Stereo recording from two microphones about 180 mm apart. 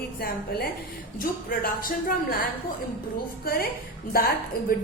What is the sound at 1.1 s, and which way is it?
A woman's voice, 50° left (ahead or behind).